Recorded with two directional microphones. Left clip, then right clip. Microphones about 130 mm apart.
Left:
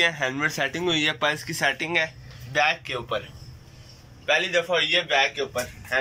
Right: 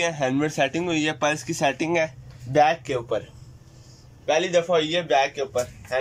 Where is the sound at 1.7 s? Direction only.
45° right (ahead or behind).